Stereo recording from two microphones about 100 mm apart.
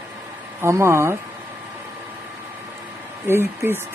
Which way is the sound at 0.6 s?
25° right (ahead or behind).